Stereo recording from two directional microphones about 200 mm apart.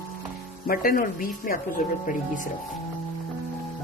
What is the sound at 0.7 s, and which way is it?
Speech, 45° left (ahead or behind).